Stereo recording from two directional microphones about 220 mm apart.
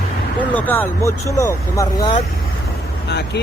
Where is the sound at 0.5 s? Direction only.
10° left (ahead or behind).